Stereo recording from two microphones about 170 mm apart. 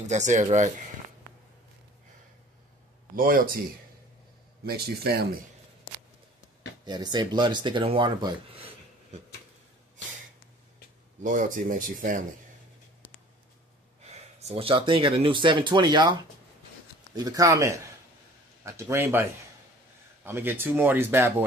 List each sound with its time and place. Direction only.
0.0 s speech: 45° right (ahead or behind)
3.2 s speech: 55° right (ahead or behind)
4.6 s speech: 65° right (ahead or behind)
6.8 s speech: 25° right (ahead or behind)
11.2 s speech: 50° right (ahead or behind)
14.1 s speech: 35° right (ahead or behind); by 19.2 s 15° right (ahead or behind)
20.2 s speech: 10° right (ahead or behind)